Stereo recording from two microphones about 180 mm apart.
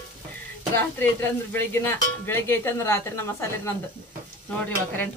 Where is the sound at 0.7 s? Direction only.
10° left (ahead or behind).